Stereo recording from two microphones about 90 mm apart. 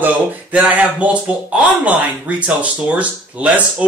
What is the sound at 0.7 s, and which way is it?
Speech, 15° right (ahead or behind).